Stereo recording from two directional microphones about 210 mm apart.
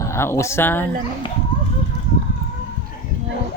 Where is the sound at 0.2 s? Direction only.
15° left (ahead or behind).